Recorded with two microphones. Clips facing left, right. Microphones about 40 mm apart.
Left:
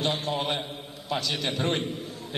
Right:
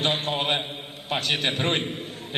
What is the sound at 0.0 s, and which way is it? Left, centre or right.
A man's voice, right.